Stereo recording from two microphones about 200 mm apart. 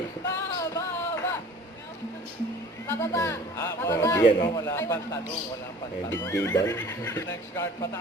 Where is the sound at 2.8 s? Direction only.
10° left (ahead or behind).